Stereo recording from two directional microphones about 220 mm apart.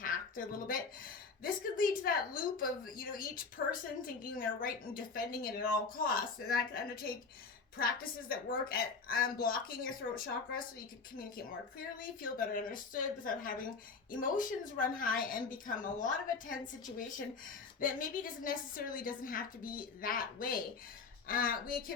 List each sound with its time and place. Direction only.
0.0 s a sound: 40° left (ahead or behind)
1.4 s a woman's voice: 40° left (ahead or behind)
11.9 s a woman's voice: 40° left (ahead or behind)